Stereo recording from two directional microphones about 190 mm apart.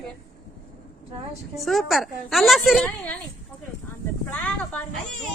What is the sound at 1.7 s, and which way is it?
A woman's voice, centre (ahead or behind).